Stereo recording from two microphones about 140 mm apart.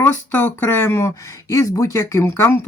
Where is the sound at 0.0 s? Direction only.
15° left (ahead or behind).